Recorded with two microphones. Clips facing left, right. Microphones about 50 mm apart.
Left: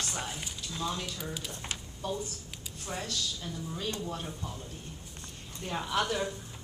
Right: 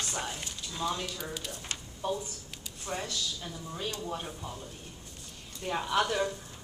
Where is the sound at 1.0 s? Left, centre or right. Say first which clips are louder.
Right 1 dB; centre.